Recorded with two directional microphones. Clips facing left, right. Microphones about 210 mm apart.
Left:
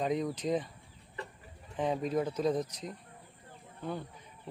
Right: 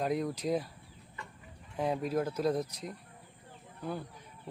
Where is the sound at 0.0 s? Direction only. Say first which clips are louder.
Even; 5° right (ahead or behind).